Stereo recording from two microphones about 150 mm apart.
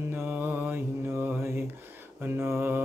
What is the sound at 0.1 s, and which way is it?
Mantra, 15° right (ahead or behind).